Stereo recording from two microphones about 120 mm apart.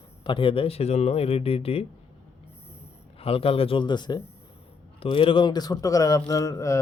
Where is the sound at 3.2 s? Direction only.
55° left (ahead or behind); by 4.2 s 40° left (ahead or behind).